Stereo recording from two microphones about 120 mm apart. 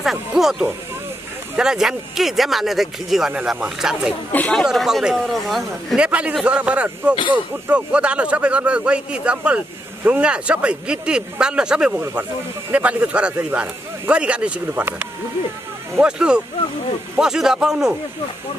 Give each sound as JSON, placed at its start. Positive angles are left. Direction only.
{"t": 0.0, "sound": "speech", "side_deg": -5}
{"t": 4.3, "sound": "speech", "side_deg": 15}
{"t": 4.6, "sound": "speech", "side_deg": 0}
{"t": 6.0, "sound": "speech", "side_deg": -10}
{"t": 12.0, "sound": "speech", "side_deg": -20}
{"t": 12.7, "sound": "speech", "side_deg": -10}